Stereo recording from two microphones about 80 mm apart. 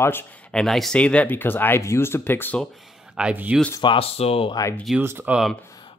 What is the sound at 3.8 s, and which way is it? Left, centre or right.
Speech, left.